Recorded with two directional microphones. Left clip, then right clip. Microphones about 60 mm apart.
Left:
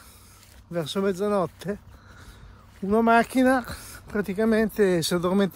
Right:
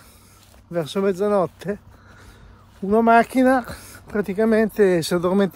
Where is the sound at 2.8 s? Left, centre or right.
Right.